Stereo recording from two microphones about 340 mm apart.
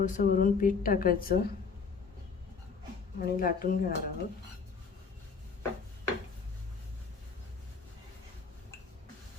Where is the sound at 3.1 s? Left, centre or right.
Left.